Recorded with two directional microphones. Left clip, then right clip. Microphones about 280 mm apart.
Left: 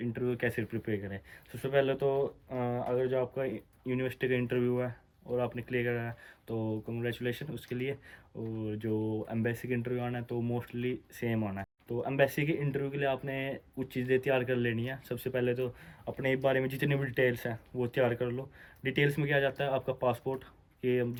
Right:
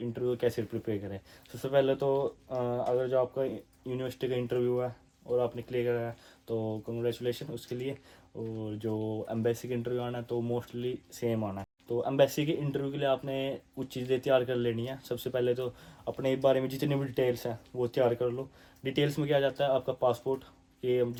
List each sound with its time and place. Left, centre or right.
0.1 s speech: centre